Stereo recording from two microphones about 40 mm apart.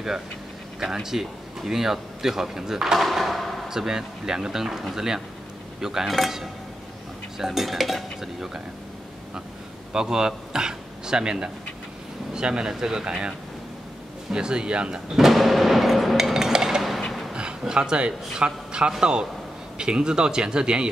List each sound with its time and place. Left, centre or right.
0.7 s speech: centre
3.0 s drawer open or close: centre
3.6 s speech: centre
7.3 s dishes: centre
9.9 s a man's voice: centre
14.3 s speech: right
15.1 s music: centre
16.3 s a sound: centre
18.4 s speech: right